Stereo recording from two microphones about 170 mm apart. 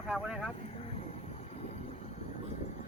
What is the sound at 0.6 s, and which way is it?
Vehicle, 35° left (ahead or behind).